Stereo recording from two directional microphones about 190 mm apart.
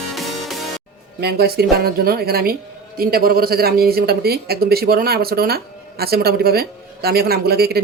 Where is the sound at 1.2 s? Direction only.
60° right (ahead or behind).